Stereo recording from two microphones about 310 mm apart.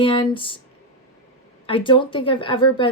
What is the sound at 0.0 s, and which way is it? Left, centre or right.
Speech, centre.